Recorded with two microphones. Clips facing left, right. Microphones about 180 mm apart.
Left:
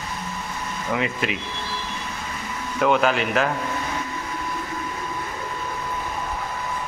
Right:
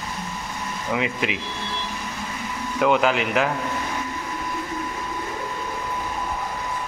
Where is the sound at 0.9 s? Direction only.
15° right (ahead or behind).